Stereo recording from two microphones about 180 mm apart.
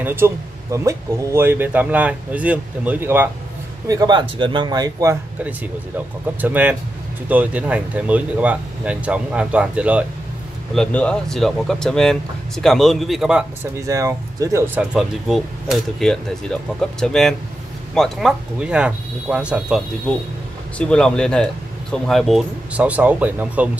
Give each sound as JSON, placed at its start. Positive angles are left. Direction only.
{"t": 0.0, "sound": "speech", "side_deg": -10}
{"t": 5.9, "sound": "speech", "side_deg": -10}
{"t": 10.7, "sound": "speech", "side_deg": 5}
{"t": 13.7, "sound": "speech", "side_deg": -15}
{"t": 20.1, "sound": "speech", "side_deg": 5}